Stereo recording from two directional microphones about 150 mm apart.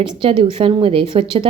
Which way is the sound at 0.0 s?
35° right (ahead or behind).